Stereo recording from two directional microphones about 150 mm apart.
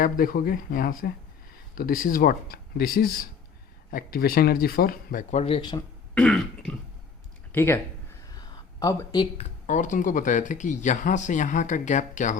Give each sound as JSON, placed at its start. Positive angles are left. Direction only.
{"t": 0.0, "sound": "speech", "side_deg": 70}
{"t": 5.3, "sound": "speech", "side_deg": 45}
{"t": 6.1, "sound": "throat clearing", "side_deg": 5}
{"t": 7.5, "sound": "speech", "side_deg": 15}
{"t": 8.3, "sound": "a sound", "side_deg": 25}
{"t": 9.4, "sound": "speech", "side_deg": 55}